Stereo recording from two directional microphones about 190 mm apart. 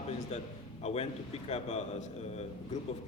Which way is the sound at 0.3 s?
35° left (ahead or behind).